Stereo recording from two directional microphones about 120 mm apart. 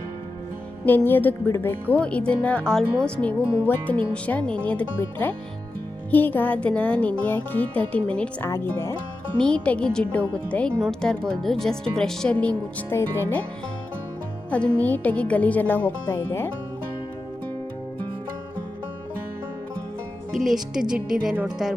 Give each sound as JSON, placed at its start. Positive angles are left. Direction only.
{"t": 0.9, "sound": "speech", "side_deg": 15}
{"t": 8.4, "sound": "speech", "side_deg": 20}
{"t": 9.4, "sound": "speech", "side_deg": 10}
{"t": 14.5, "sound": "speech", "side_deg": 10}
{"t": 20.3, "sound": "speech", "side_deg": 0}